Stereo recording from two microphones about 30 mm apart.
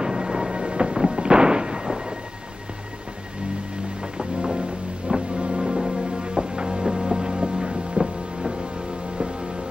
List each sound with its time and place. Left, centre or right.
0.0 s artillery fire: right
1.9 s thunder: right
4.2 s music: right
5.6 s music: right
8.0 s a sound: right